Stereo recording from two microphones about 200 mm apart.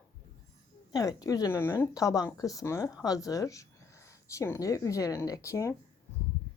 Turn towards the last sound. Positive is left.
turn(degrees=15)  # may be behind; listen again after turning